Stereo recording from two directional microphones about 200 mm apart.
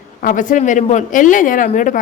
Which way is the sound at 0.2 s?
40° left (ahead or behind).